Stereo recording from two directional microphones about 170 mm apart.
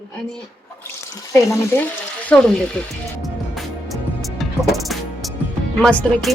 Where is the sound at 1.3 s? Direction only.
20° left (ahead or behind).